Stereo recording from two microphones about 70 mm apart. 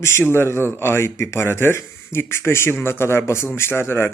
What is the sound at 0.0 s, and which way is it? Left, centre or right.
Speech, left.